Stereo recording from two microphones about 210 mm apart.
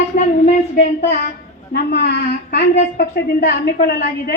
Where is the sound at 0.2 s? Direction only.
40° left (ahead or behind).